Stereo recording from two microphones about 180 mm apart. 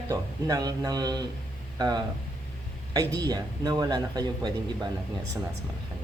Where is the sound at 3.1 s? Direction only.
20° right (ahead or behind).